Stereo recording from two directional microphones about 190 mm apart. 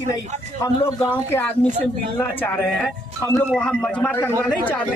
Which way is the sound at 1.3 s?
5° left (ahead or behind).